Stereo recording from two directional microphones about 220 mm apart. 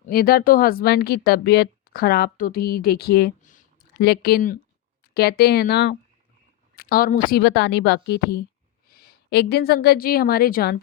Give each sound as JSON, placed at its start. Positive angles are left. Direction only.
{"t": 0.1, "sound": "a woman's voice", "side_deg": 45}